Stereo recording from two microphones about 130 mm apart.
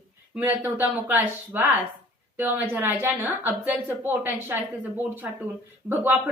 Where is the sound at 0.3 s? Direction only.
15° right (ahead or behind).